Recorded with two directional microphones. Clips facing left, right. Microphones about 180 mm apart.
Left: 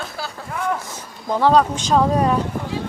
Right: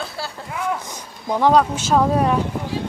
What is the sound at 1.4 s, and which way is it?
Speech, 10° right (ahead or behind).